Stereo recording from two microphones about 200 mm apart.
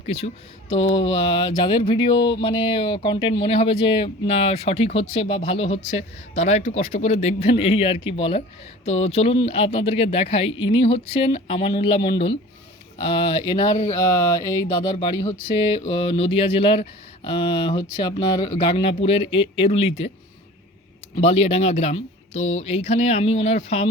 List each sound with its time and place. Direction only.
0.0 s speech: 30° left (ahead or behind)
21.2 s speech: 30° left (ahead or behind)